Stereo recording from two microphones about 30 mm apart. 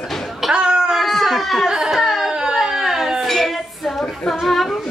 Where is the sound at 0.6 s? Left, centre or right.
Right.